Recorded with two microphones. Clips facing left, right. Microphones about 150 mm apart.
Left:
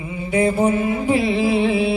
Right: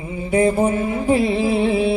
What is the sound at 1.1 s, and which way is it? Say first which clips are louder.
Music: right 2 dB; 40° right (ahead or behind).